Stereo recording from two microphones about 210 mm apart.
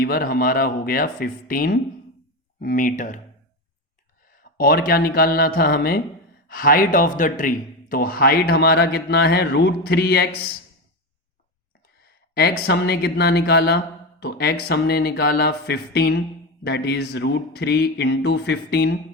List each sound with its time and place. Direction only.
0.0 s speech: 45° left (ahead or behind)
4.5 s speech: 45° left (ahead or behind)
12.3 s speech: 50° left (ahead or behind)